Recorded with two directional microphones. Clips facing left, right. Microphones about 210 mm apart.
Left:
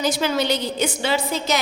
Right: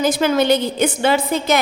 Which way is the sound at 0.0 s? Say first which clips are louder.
Right 5 dB; 50° right (ahead or behind).